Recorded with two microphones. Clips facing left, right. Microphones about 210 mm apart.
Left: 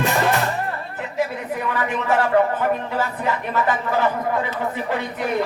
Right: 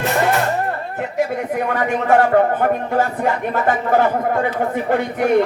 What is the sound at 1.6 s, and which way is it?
A man's voice, 50° right (ahead or behind).